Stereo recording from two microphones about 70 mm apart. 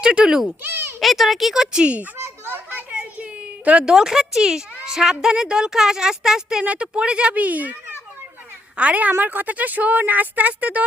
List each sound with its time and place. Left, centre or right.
0.0 s speech: centre
0.6 s speech: right
1.0 s speech: centre
2.1 s children playing: right
2.9 s a sound: centre
4.9 s a woman's voice: centre